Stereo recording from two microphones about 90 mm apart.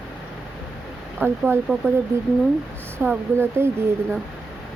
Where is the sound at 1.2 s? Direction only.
25° right (ahead or behind).